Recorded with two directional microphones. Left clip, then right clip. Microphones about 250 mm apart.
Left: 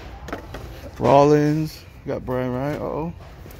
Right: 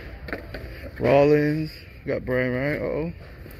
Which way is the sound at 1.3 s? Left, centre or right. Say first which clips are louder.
Left 2 dB; centre.